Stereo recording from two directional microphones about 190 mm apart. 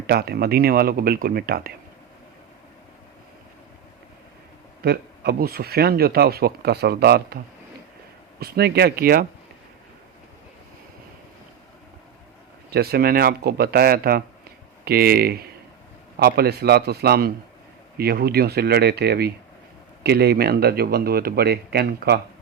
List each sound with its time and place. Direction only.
0.1 s speech: 55° right (ahead or behind)
4.8 s speech: 55° right (ahead or behind)
8.4 s speech: 55° right (ahead or behind)
12.7 s speech: 55° right (ahead or behind)